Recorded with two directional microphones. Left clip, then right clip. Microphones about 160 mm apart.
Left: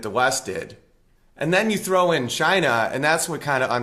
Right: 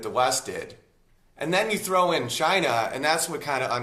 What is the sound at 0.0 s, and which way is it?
Speech, 45° left (ahead or behind).